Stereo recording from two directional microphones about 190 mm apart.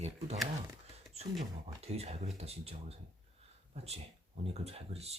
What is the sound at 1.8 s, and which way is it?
Speech, 35° right (ahead or behind).